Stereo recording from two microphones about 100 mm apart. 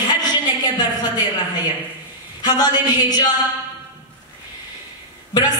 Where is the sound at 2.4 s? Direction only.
45° left (ahead or behind).